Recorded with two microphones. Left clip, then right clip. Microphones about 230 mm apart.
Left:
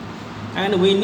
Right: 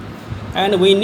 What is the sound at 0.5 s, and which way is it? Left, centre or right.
Speech, right.